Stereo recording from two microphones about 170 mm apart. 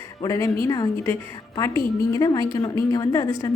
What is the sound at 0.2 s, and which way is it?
A woman's voice, 20° left (ahead or behind).